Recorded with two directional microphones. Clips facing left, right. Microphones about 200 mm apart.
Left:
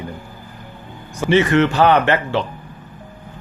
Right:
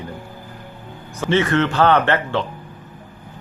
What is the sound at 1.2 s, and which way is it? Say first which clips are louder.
Speech: left 3 dB; 15° left (ahead or behind).